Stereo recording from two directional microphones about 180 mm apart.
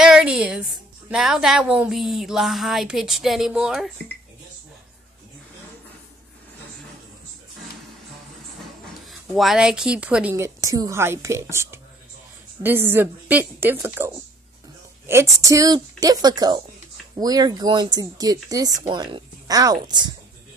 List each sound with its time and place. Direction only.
0.0 s a sound: 5° right (ahead or behind)
1.1 s speech: 5° right (ahead or behind)
9.0 s a woman's voice: centre (ahead or behind); by 20.2 s 25° right (ahead or behind)